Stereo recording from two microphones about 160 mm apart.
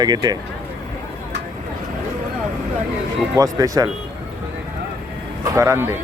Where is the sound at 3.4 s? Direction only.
20° right (ahead or behind).